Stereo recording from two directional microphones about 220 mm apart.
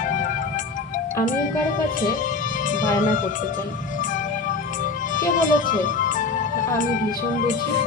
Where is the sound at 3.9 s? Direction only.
35° left (ahead or behind).